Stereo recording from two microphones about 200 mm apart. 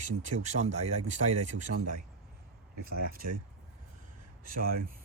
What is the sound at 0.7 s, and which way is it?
Speech, 35° right (ahead or behind).